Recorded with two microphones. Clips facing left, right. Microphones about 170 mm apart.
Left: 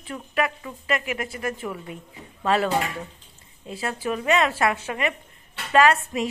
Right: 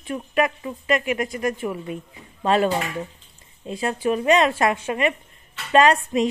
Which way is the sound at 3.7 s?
20° right (ahead or behind).